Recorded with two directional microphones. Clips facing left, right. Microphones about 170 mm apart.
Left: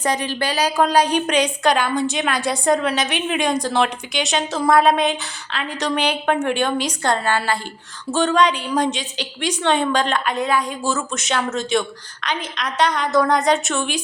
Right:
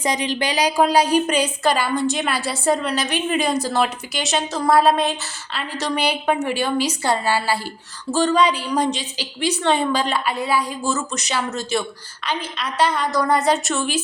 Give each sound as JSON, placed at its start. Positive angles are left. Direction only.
{"t": 0.0, "sound": "a woman's voice", "side_deg": -15}